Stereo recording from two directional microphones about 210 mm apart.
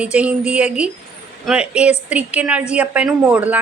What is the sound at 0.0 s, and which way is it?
A woman's voice, 5° right (ahead or behind).